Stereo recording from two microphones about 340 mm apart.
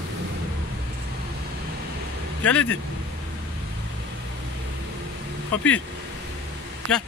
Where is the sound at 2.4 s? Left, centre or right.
Centre.